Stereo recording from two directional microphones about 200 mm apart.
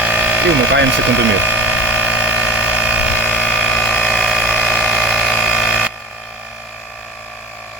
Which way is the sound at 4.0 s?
5° right (ahead or behind).